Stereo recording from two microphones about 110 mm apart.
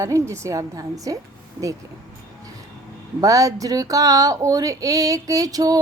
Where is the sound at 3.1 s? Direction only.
30° right (ahead or behind).